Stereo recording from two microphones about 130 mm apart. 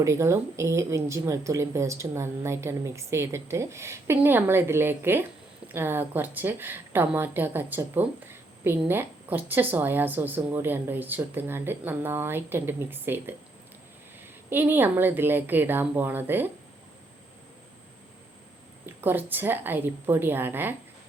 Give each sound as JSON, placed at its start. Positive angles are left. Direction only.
{"t": 0.0, "sound": "a woman's voice", "side_deg": -20}
{"t": 14.5, "sound": "a woman's voice", "side_deg": -15}
{"t": 18.9, "sound": "a woman's voice", "side_deg": -15}